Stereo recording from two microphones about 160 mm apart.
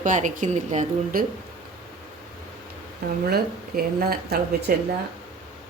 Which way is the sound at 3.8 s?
70° right (ahead or behind).